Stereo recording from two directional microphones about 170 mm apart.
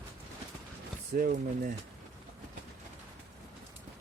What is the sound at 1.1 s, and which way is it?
Speech, 55° right (ahead or behind).